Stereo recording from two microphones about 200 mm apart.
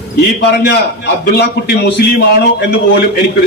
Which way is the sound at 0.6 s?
55° left (ahead or behind).